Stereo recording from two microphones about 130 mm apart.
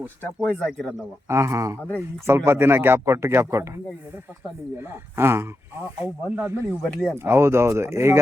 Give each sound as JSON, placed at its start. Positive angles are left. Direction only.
{"t": 0.6, "sound": "speech", "side_deg": 5}
{"t": 1.3, "sound": "speech", "side_deg": -20}
{"t": 4.8, "sound": "speech", "side_deg": -20}
{"t": 6.8, "sound": "speech", "side_deg": 5}
{"t": 7.3, "sound": "speech", "side_deg": -20}